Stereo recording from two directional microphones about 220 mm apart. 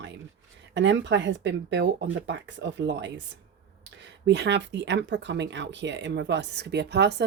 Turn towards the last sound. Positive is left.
turn(degrees=-50)  # may be behind; listen again after turning